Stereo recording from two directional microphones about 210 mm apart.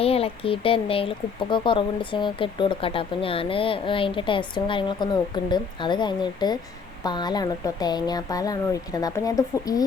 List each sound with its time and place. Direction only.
0.0 s speech: 30° left (ahead or behind)